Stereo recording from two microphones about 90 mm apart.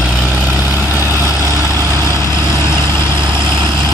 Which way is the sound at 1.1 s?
35° right (ahead or behind).